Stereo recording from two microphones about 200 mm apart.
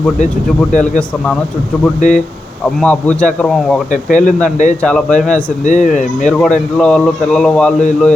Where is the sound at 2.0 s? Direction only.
40° left (ahead or behind).